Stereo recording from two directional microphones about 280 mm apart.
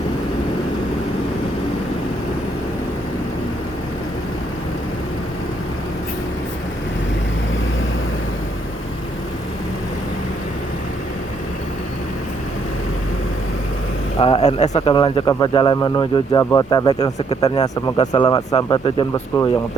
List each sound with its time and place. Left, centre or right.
14.2 s speech: left